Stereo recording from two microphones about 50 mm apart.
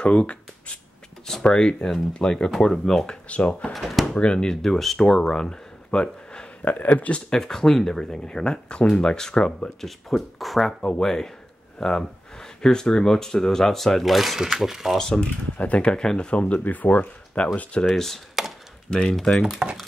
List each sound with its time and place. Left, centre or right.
0.0 s speech: left; by 3.2 s centre
3.3 s speech: left
3.7 s speech: centre
4.1 s speech: left
6.6 s speech: left; by 9.7 s centre
9.8 s speech: centre
10.8 s speech: centre
15.0 s speech: centre
15.2 s speech: left
16.5 s speech: left
17.9 s speech: centre
19.4 s speech: centre